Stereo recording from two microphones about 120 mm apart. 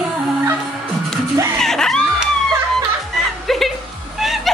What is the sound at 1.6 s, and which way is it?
Screaming, 5° left (ahead or behind).